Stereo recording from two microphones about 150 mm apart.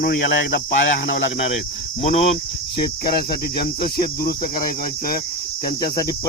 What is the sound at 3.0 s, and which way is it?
Cricket, 90° left.